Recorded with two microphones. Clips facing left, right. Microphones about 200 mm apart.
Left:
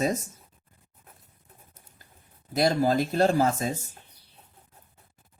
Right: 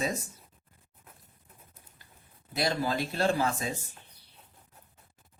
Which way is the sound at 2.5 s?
45° left (ahead or behind).